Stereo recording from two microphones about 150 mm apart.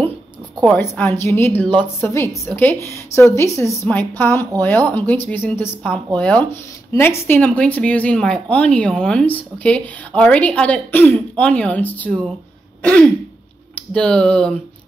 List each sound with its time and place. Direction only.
0.6 s speech: 10° left (ahead or behind)